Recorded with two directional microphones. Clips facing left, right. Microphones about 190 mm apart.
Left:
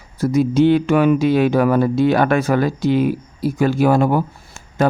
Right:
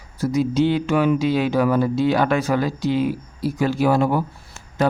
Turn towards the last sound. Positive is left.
turn(degrees=50)  # may be behind; listen again after turning